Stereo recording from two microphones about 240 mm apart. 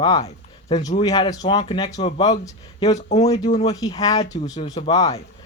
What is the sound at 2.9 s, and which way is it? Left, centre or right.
Speech, left.